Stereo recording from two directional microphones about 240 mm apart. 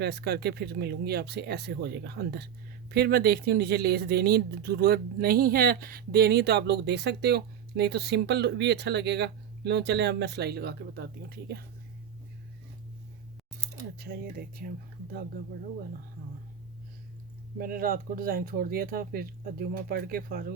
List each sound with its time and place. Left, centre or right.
0.0 s speech: right
14.0 s speech: right
17.6 s speech: right